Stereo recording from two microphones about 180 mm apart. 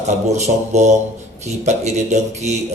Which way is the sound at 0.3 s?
40° right (ahead or behind).